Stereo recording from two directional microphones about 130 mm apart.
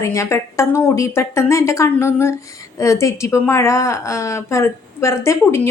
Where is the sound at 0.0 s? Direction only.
25° left (ahead or behind).